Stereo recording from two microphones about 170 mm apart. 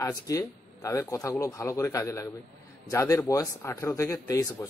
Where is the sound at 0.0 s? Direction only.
20° left (ahead or behind).